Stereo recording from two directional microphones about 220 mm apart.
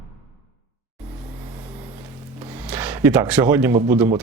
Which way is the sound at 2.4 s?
10° right (ahead or behind).